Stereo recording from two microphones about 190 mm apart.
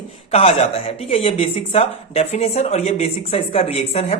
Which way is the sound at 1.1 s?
30° left (ahead or behind).